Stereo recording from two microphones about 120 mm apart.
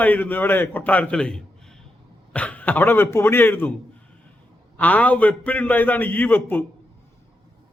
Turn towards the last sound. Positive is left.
turn(degrees=15)  # may be behind; listen again after turning